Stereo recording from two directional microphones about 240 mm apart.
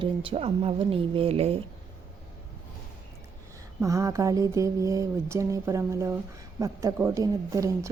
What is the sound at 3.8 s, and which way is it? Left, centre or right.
Speech, centre.